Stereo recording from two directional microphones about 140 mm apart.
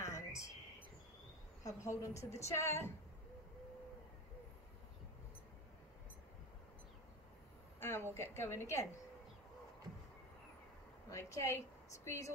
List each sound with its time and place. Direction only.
0.0 s whispering: 20° left (ahead or behind)
1.6 s a woman's voice: 20° left (ahead or behind)
7.8 s a woman's voice: 15° left (ahead or behind)
11.1 s a woman's voice: 20° left (ahead or behind)